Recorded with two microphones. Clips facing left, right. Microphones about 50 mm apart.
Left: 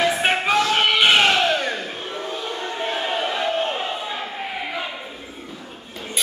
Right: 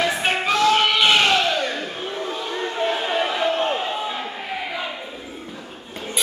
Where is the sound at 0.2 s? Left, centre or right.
Centre.